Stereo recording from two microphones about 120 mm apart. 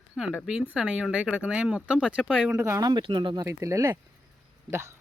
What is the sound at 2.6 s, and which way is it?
Speech, 25° right (ahead or behind).